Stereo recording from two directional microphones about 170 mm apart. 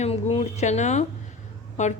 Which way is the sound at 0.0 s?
35° left (ahead or behind).